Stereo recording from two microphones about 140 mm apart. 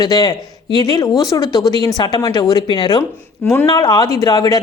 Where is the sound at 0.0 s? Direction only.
30° left (ahead or behind).